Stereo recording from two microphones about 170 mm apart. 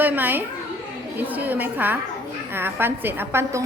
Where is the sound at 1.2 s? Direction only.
10° right (ahead or behind).